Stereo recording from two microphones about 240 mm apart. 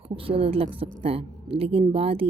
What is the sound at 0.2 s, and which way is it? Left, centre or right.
A woman's voice, right.